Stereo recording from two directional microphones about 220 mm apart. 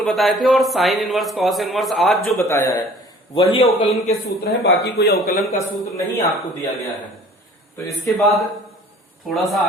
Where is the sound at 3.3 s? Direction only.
25° left (ahead or behind).